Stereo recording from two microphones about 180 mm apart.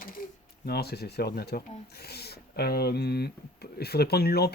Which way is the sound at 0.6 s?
60° left (ahead or behind).